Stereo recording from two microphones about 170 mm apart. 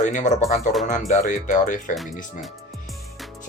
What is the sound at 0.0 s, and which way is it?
Speech, 45° left (ahead or behind).